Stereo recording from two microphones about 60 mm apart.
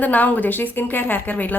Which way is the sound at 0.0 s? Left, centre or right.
Left.